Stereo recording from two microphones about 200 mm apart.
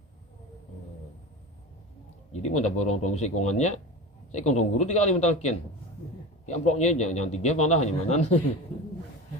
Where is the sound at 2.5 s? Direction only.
35° left (ahead or behind).